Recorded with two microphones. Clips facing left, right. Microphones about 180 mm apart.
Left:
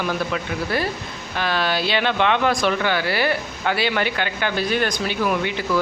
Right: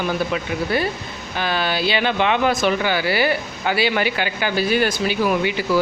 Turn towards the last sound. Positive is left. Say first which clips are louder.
# right 3 dB
turn(degrees=-5)  # may be behind; listen again after turning